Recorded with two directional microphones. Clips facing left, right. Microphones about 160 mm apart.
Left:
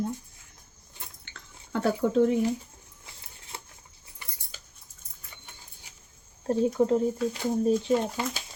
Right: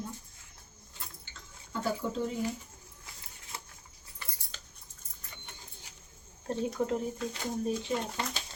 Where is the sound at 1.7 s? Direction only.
65° left (ahead or behind).